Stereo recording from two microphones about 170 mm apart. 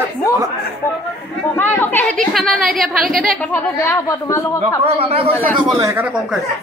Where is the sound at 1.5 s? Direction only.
10° left (ahead or behind).